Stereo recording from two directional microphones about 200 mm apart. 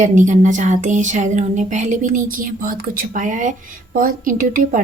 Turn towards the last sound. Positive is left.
turn(degrees=-45)  # may be behind; listen again after turning